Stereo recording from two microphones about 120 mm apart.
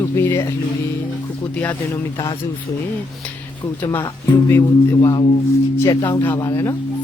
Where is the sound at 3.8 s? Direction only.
15° left (ahead or behind).